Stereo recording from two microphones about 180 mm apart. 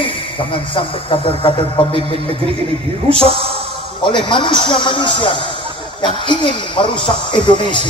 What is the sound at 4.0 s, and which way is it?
Speech, 25° left (ahead or behind).